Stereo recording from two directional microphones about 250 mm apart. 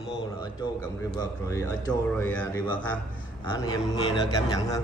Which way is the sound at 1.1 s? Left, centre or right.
Centre.